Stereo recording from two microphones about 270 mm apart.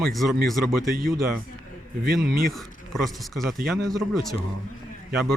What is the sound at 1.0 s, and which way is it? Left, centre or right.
Speech, right.